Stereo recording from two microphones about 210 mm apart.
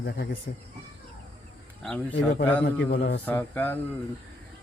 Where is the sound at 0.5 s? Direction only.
50° left (ahead or behind).